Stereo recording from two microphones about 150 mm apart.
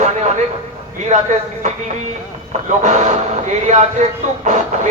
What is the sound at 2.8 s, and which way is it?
Speech, 50° right (ahead or behind).